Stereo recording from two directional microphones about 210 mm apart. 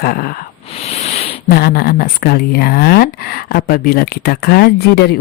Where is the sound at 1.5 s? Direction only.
45° left (ahead or behind).